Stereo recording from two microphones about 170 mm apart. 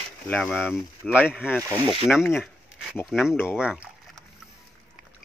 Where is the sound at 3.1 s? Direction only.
5° right (ahead or behind).